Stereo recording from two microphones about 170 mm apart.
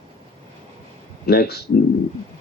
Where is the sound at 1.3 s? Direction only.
70° left (ahead or behind).